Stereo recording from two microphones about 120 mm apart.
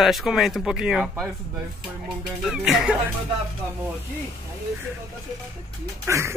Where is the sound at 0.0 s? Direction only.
Centre (ahead or behind).